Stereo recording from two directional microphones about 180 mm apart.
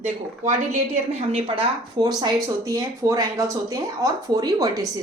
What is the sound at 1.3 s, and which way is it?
Speech, 30° right (ahead or behind).